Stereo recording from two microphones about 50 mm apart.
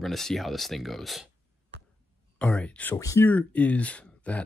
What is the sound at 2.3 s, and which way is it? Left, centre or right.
Speech, left.